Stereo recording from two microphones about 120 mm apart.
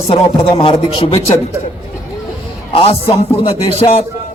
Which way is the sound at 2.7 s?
50° left (ahead or behind).